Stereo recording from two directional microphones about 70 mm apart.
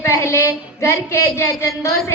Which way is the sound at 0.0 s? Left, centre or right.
Left.